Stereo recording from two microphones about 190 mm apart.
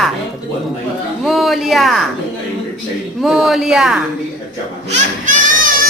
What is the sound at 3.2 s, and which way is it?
Speech, centre (ahead or behind).